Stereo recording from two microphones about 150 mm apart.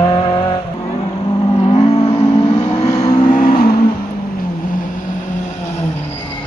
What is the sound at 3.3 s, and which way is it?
Vehicle, 70° left (ahead or behind).